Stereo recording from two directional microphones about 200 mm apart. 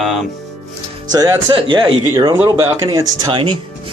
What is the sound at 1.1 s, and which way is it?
Speech, 20° right (ahead or behind).